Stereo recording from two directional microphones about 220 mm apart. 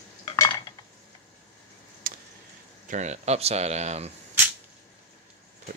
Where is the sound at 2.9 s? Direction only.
30° right (ahead or behind).